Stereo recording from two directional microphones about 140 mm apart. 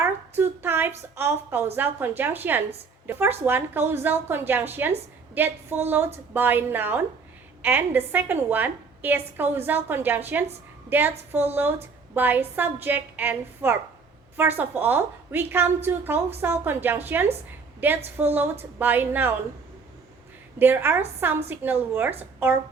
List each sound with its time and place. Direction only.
0.0 s a sound: 15° right (ahead or behind)
1.7 s a woman's voice: 15° right (ahead or behind)
20.6 s a woman's voice: 15° right (ahead or behind)